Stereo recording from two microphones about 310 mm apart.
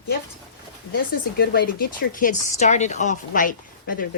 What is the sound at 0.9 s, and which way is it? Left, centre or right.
A woman's voice, left.